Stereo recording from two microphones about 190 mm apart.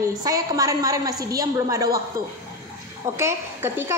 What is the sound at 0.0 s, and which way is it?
A woman's voice, 20° right (ahead or behind).